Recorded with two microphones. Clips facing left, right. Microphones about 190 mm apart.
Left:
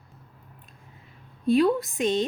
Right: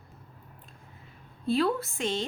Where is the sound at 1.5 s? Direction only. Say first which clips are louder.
Left 6 dB; 15° left (ahead or behind).